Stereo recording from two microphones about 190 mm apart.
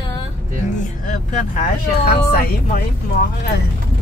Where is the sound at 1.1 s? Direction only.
45° left (ahead or behind).